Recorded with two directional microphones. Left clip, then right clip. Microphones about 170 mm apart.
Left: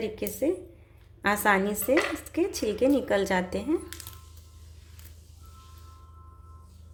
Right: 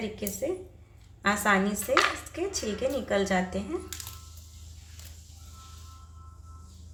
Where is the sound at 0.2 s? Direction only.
50° left (ahead or behind).